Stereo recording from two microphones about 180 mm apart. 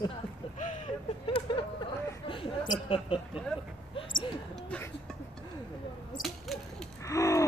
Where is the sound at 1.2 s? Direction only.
30° left (ahead or behind).